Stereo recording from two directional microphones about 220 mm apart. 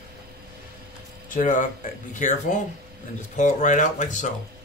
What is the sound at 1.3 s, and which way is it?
A man's voice, 35° left (ahead or behind).